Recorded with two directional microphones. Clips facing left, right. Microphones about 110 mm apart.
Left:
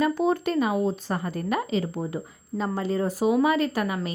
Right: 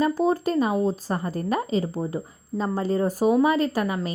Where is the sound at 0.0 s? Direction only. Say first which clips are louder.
Right 1 dB; 35° right (ahead or behind).